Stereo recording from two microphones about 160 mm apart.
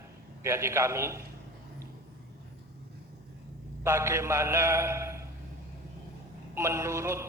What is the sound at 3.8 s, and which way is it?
A man's voice, 15° right (ahead or behind).